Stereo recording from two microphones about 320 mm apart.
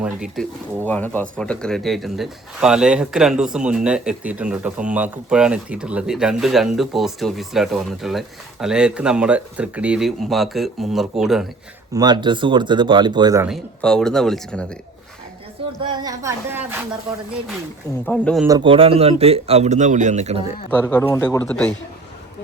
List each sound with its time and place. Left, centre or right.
0.0 s speech: centre
11.9 s speech: centre
15.8 s speech: centre
18.0 s speech: centre
18.4 s speech: centre
20.7 s speech: centre